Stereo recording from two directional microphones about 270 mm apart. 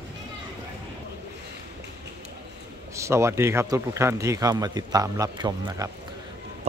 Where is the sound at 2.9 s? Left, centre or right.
Centre.